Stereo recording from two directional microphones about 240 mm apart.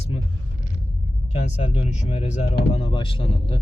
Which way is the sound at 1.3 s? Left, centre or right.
Left.